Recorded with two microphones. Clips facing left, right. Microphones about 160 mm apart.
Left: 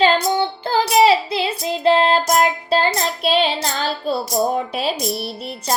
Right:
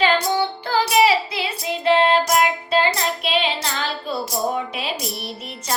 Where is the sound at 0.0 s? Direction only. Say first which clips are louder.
Left 3 dB; 30° left (ahead or behind).